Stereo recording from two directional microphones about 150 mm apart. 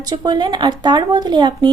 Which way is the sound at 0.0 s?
25° right (ahead or behind).